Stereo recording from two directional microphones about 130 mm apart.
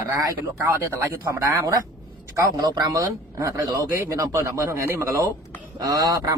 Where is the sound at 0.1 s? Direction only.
20° right (ahead or behind).